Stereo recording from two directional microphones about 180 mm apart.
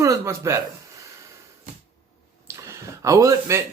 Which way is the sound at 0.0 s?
15° right (ahead or behind).